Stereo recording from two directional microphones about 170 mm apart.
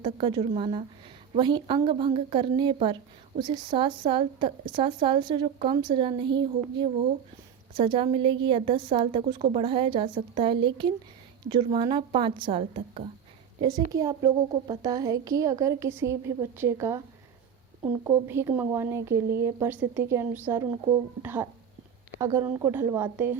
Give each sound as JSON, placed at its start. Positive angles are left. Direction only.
{"t": 0.0, "sound": "a woman's voice", "side_deg": -30}
{"t": 13.6, "sound": "a woman's voice", "side_deg": -20}